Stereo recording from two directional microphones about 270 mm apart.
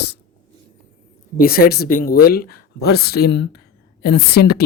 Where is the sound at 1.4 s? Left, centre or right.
Left.